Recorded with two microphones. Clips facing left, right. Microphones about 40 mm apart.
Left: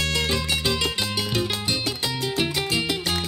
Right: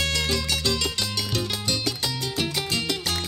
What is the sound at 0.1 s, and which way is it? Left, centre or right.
Music, left.